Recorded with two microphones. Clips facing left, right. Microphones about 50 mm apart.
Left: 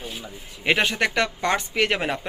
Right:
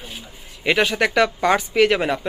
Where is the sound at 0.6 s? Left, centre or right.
Centre.